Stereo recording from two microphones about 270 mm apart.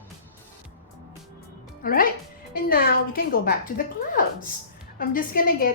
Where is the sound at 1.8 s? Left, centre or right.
Left.